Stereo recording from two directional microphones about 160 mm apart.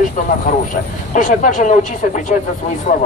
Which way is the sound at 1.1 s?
55° left (ahead or behind).